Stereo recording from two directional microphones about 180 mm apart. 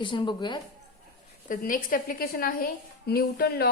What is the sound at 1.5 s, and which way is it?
A woman's voice, 50° left (ahead or behind).